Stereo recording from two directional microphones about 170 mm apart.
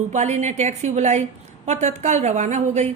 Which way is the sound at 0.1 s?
45° right (ahead or behind).